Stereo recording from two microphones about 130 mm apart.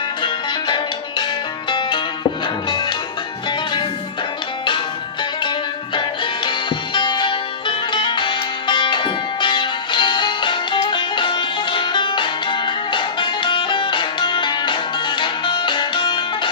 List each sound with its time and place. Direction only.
2.6 s music: 35° left (ahead or behind)
5.9 s music: 40° left (ahead or behind)